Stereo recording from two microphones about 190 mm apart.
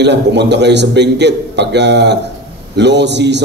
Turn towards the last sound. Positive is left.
turn(degrees=-65)  # may be behind; listen again after turning